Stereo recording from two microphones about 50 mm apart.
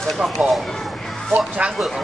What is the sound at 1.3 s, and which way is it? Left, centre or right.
Speech, right.